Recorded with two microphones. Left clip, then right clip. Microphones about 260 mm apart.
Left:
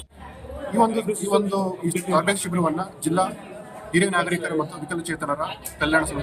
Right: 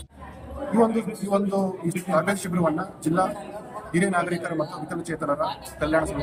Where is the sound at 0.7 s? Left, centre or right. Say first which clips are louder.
Left 2 dB; centre.